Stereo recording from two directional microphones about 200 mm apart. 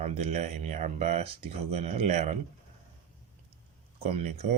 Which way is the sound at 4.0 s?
30° right (ahead or behind).